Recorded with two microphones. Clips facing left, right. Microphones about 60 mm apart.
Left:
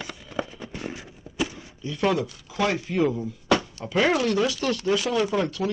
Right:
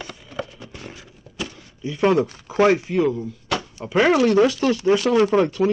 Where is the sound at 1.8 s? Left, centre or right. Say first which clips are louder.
Right 5 dB; centre.